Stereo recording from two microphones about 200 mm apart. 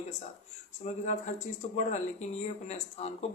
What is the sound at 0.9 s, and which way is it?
Speech, 35° left (ahead or behind).